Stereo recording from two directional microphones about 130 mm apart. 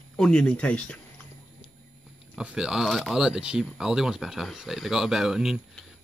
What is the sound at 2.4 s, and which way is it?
Speech, 5° right (ahead or behind).